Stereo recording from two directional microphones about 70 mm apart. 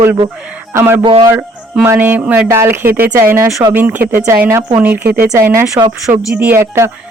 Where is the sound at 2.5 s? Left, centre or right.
Right.